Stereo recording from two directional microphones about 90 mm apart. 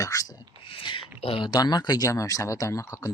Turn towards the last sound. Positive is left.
turn(degrees=35)  # may be behind; listen again after turning